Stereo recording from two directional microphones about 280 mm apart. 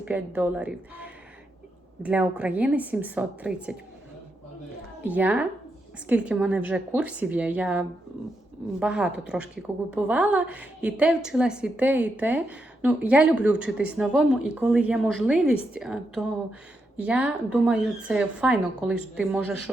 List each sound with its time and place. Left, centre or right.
0.0 s a woman's voice: centre
5.0 s a woman's voice: centre